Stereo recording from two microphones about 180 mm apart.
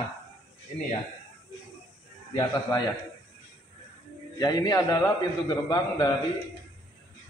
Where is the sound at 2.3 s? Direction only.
20° left (ahead or behind).